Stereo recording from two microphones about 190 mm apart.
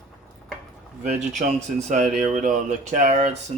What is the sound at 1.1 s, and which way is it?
Speech, 40° right (ahead or behind).